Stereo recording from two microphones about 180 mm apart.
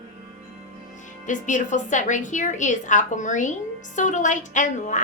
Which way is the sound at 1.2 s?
45° left (ahead or behind).